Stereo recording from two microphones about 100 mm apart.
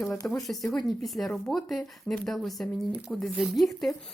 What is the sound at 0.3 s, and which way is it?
Speech, 5° left (ahead or behind).